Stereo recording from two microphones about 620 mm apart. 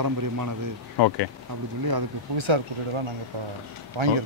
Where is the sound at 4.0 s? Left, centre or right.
Right.